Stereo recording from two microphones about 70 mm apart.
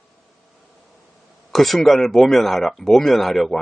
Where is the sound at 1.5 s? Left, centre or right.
Centre.